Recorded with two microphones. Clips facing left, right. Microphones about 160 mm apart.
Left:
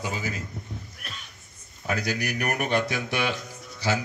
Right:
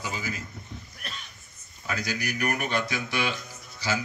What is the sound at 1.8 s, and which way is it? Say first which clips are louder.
Speech: left 3 dB; 60° left (ahead or behind).